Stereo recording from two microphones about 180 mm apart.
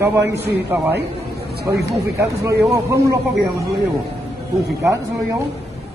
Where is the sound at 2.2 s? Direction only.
15° right (ahead or behind).